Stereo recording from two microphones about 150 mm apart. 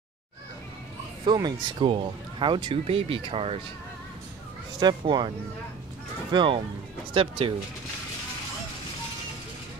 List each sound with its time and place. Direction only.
1.2 s speech: 30° right (ahead or behind)
4.7 s speech: 30° right (ahead or behind)
6.3 s speech: 35° right (ahead or behind)